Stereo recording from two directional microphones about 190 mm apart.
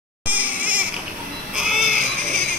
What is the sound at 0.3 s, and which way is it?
Crying, 10° right (ahead or behind).